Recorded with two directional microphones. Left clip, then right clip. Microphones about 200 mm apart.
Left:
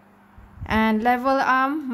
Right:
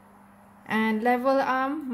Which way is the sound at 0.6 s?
35° left (ahead or behind).